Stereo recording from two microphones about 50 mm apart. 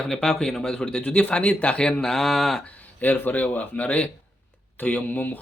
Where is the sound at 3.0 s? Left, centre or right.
Left.